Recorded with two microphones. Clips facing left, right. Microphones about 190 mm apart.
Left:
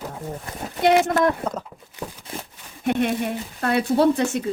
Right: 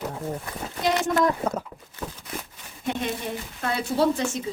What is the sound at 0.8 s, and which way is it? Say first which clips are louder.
Speech: left 5 dB; 60° left (ahead or behind).